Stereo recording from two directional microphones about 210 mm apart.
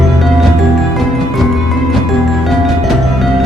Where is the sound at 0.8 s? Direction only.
Centre (ahead or behind).